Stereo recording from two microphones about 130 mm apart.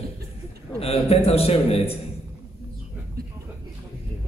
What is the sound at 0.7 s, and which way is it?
A man's voice, 50° left (ahead or behind).